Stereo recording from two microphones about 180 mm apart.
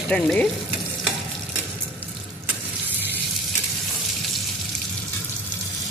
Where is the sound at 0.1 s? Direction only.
5° left (ahead or behind).